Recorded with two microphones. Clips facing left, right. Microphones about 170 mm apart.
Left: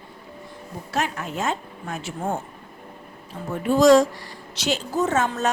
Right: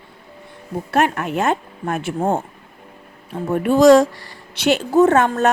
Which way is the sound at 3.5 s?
60° right (ahead or behind).